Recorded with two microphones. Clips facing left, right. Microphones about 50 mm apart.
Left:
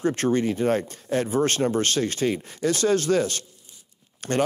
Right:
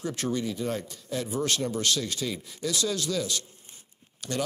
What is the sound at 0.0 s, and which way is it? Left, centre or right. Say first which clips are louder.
Speech: left 8 dB; left.